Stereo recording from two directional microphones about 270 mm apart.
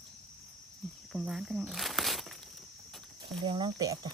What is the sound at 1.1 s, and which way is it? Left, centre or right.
Speech, centre.